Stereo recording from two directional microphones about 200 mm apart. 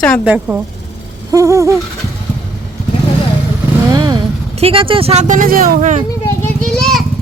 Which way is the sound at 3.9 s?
20° right (ahead or behind).